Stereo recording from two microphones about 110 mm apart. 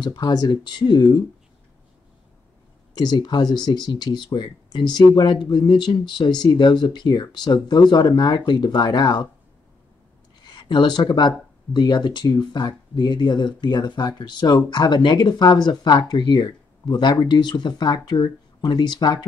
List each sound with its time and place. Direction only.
0.0 s speech: 40° left (ahead or behind)
2.9 s speech: 40° left (ahead or behind)
10.6 s speech: 45° left (ahead or behind)